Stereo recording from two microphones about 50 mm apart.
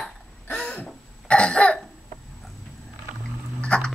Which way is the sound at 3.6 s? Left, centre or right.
Left.